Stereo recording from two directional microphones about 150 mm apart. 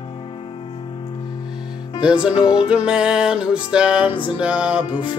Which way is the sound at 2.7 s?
5° right (ahead or behind).